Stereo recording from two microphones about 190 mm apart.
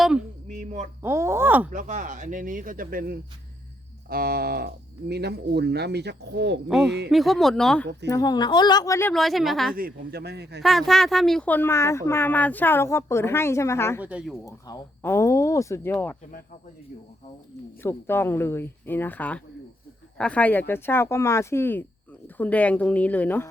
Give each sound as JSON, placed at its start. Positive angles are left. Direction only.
{"t": 0.0, "sound": "a sound", "side_deg": 0}
{"t": 0.5, "sound": "speech", "side_deg": -40}
{"t": 1.0, "sound": "speech", "side_deg": -15}
{"t": 1.7, "sound": "speech", "side_deg": -40}
{"t": 6.7, "sound": "speech", "side_deg": 0}
{"t": 8.0, "sound": "speech", "side_deg": 20}
{"t": 9.1, "sound": "speech", "side_deg": 0}
{"t": 9.7, "sound": "speech", "side_deg": -55}
{"t": 10.6, "sound": "speech", "side_deg": 0}
{"t": 14.0, "sound": "speech", "side_deg": -5}
{"t": 14.4, "sound": "speech", "side_deg": 15}
{"t": 17.8, "sound": "speech", "side_deg": 10}